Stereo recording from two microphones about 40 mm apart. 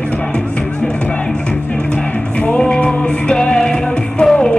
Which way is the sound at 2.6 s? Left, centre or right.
Left.